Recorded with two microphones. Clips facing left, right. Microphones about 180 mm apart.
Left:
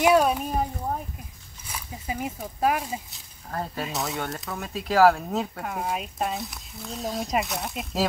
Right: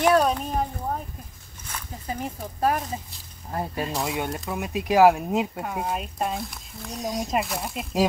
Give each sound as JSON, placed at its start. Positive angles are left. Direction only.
{"t": 0.0, "sound": "a sound", "side_deg": 10}
{"t": 1.7, "sound": "speech", "side_deg": 10}
{"t": 4.2, "sound": "speech", "side_deg": -15}
{"t": 5.7, "sound": "speech", "side_deg": 0}
{"t": 6.9, "sound": "speech", "side_deg": -15}
{"t": 7.2, "sound": "speech", "side_deg": 0}